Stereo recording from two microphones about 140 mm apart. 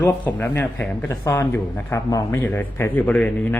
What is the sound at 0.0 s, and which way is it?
A man's voice, 15° left (ahead or behind).